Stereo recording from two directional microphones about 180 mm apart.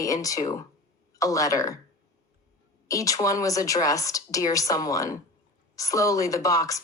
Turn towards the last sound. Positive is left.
turn(degrees=20)  # may be behind; listen again after turning